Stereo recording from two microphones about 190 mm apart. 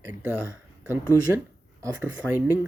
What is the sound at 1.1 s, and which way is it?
Speech, 15° left (ahead or behind).